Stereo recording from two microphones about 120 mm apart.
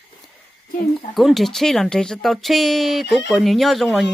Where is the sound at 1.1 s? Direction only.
Centre (ahead or behind).